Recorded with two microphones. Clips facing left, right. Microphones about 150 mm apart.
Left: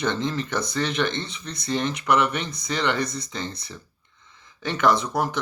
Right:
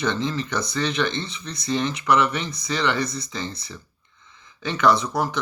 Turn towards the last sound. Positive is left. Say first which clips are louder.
# right 1 dB
turn(degrees=50)  # may be behind; listen again after turning